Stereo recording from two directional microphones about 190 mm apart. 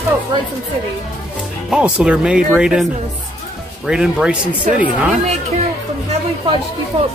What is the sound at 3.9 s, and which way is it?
Speech, 5° right (ahead or behind).